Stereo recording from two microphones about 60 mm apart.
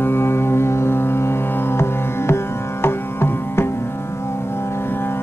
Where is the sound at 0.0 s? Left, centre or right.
Left.